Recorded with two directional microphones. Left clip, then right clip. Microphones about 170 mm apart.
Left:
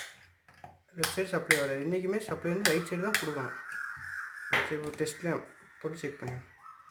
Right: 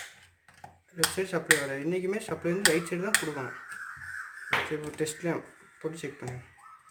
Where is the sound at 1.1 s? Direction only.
15° right (ahead or behind).